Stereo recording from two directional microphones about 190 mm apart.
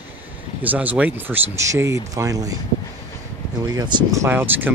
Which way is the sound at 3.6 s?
20° right (ahead or behind).